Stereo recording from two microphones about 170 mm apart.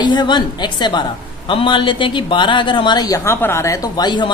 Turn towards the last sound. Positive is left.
turn(degrees=25)  # may be behind; listen again after turning